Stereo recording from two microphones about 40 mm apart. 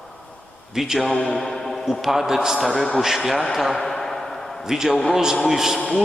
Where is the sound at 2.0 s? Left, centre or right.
Centre.